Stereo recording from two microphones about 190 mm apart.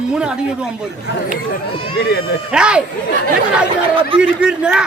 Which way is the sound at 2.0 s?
55° left (ahead or behind).